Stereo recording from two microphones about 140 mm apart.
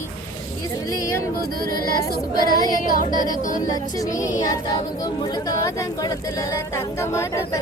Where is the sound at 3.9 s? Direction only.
25° left (ahead or behind).